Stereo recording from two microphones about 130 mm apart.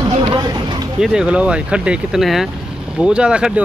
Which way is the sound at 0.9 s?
5° right (ahead or behind).